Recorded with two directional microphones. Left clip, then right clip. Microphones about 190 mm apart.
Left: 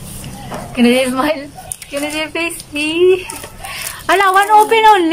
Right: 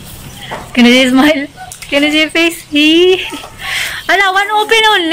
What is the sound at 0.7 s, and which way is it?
Speech, centre (ahead or behind).